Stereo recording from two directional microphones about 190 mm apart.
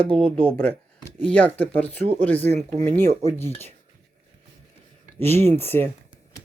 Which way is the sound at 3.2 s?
10° left (ahead or behind).